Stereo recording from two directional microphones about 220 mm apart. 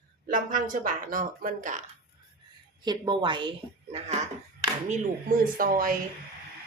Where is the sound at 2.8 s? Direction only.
20° right (ahead or behind).